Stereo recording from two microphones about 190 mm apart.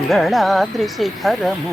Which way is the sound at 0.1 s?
Centre (ahead or behind).